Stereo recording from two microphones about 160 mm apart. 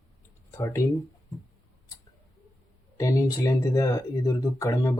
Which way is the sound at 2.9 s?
20° left (ahead or behind).